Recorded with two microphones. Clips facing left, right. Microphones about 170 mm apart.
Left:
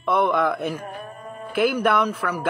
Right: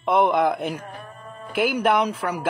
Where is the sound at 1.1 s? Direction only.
35° left (ahead or behind).